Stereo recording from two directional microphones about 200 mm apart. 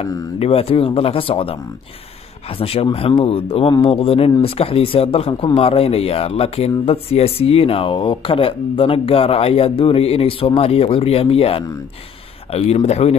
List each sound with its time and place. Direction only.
0.0 s speech: 20° left (ahead or behind)
0.4 s speech: 30° left (ahead or behind)
2.6 s speech: 30° left (ahead or behind)